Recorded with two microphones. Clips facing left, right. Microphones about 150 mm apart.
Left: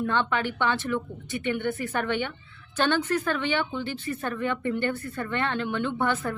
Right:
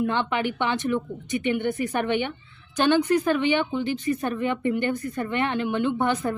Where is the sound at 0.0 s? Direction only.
15° right (ahead or behind).